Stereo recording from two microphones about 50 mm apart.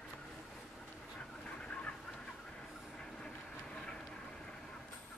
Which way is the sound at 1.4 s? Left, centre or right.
Left.